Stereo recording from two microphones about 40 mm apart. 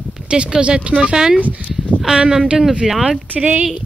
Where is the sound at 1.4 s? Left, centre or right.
Right.